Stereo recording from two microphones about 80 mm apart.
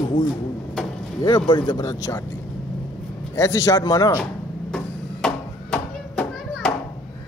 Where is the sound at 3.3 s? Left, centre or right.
Left.